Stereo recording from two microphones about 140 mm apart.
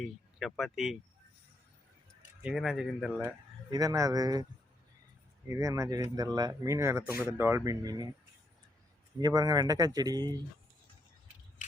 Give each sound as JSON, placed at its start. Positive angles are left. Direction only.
{"t": 0.0, "sound": "speech", "side_deg": 0}
{"t": 2.4, "sound": "speech", "side_deg": -5}
{"t": 3.7, "sound": "speech", "side_deg": -25}
{"t": 5.5, "sound": "speech", "side_deg": -20}
{"t": 9.2, "sound": "speech", "side_deg": -30}